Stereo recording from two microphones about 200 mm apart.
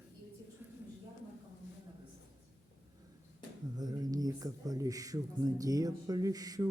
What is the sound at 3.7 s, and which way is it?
Speech, 20° right (ahead or behind).